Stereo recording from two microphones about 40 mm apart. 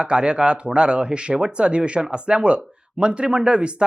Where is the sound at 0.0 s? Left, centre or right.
Right.